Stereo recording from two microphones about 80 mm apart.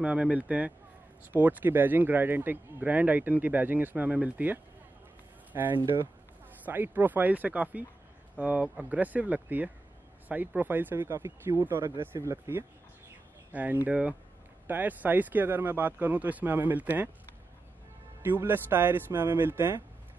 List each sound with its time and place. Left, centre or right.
0.0 s a man's voice: centre; by 12.6 s right
13.5 s a man's voice: right
18.2 s a man's voice: right